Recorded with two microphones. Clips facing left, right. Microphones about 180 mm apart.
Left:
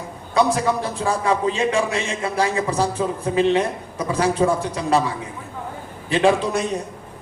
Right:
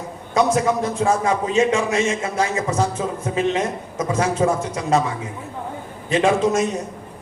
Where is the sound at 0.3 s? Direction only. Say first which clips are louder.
Right 1 dB; 35° left (ahead or behind).